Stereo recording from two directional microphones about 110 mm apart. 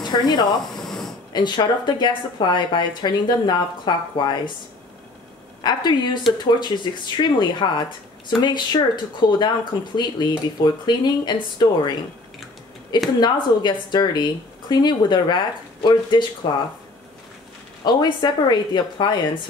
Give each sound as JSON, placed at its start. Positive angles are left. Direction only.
{"t": 0.0, "sound": "speech", "side_deg": 40}
{"t": 0.7, "sound": "a sound", "side_deg": 5}
{"t": 1.3, "sound": "speech", "side_deg": 45}
{"t": 5.6, "sound": "speech", "side_deg": 40}
{"t": 13.2, "sound": "speech", "side_deg": 45}
{"t": 17.8, "sound": "speech", "side_deg": 40}